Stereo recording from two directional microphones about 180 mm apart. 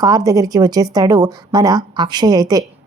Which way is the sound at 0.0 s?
20° right (ahead or behind).